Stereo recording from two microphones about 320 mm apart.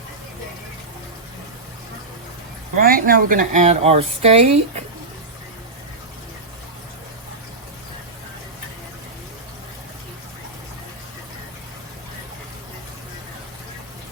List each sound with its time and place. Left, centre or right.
2.7 s speech: right